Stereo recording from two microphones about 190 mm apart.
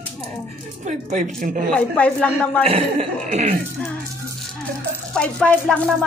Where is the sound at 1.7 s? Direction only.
5° left (ahead or behind).